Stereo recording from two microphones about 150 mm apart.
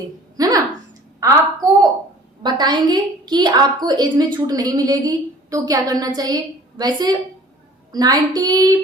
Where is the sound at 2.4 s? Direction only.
30° right (ahead or behind).